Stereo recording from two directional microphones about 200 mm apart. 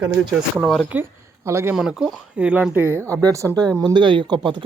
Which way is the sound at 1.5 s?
10° right (ahead or behind).